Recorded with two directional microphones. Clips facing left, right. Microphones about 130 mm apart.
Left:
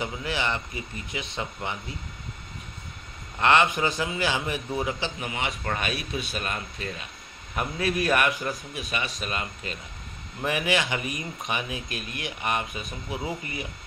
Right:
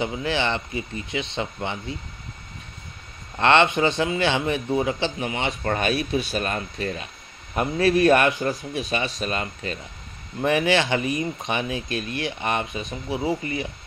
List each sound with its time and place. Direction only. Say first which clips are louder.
0.0 s speech: right 5 dB; 30° right (ahead or behind)
3.3 s speech: right 3 dB; 30° right (ahead or behind)
5.6 s speech: right 7 dB; 35° right (ahead or behind)
7.5 s speech: right 7 dB; 30° right (ahead or behind)